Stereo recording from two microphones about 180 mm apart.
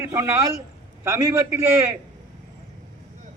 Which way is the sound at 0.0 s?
15° right (ahead or behind).